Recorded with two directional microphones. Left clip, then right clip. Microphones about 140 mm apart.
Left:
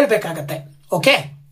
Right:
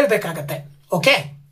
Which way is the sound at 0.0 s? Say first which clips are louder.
Left 1 dB; 5° left (ahead or behind).